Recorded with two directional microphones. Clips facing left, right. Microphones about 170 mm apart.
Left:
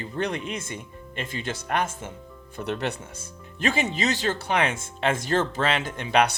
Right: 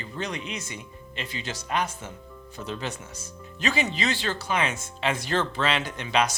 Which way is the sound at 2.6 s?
65° left (ahead or behind).